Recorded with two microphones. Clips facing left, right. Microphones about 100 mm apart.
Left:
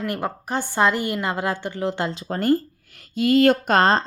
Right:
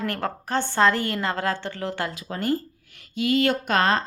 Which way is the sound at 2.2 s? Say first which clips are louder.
Left 7 dB; 40° left (ahead or behind).